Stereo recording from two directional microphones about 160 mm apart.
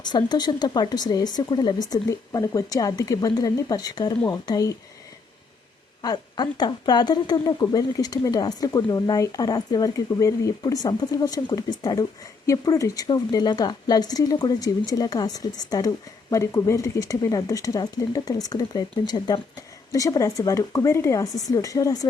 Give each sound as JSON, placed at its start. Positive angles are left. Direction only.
{"t": 0.0, "sound": "speech", "side_deg": 25}
{"t": 6.0, "sound": "speech", "side_deg": 25}